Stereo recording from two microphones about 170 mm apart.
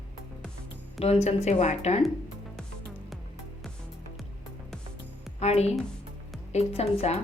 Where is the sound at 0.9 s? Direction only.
35° left (ahead or behind).